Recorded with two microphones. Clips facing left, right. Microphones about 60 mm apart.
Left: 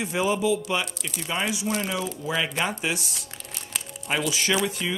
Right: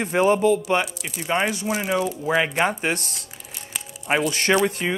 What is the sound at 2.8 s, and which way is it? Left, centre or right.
Speech, right.